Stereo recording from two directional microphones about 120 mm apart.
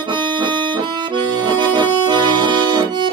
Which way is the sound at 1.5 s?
40° right (ahead or behind).